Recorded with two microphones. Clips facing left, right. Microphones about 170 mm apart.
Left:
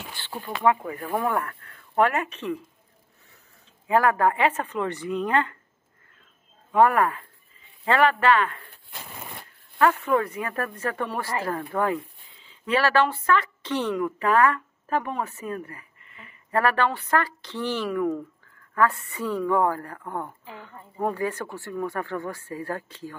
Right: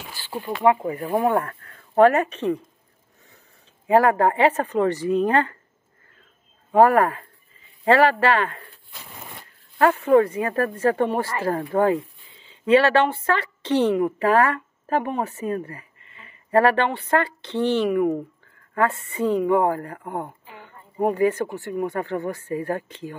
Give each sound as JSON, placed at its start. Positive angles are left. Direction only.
{"t": 0.1, "sound": "speech", "side_deg": -10}
{"t": 0.7, "sound": "speech", "side_deg": -45}
{"t": 1.2, "sound": "speech", "side_deg": -30}
{"t": 3.8, "sound": "speech", "side_deg": -30}
{"t": 6.7, "sound": "speech", "side_deg": -40}
{"t": 9.8, "sound": "a woman's voice", "side_deg": -30}